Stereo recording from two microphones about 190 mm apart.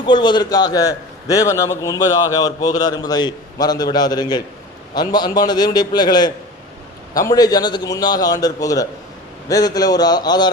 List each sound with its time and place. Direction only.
0.0 s a man's voice: 25° left (ahead or behind)